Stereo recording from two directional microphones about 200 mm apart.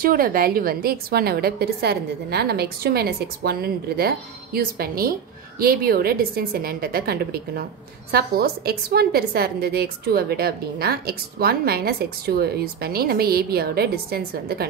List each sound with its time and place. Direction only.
0.0 s a woman's voice: 45° right (ahead or behind)